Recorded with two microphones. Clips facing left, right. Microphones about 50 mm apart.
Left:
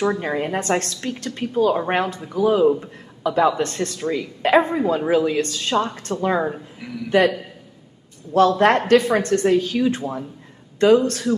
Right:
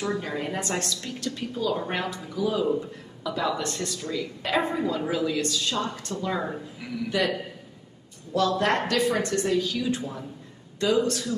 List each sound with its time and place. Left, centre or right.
0.0 s a woman's voice: left
6.8 s speech: centre
7.1 s speech: left